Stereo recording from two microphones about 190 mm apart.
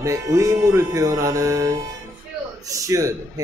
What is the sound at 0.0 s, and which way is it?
Music, 15° right (ahead or behind).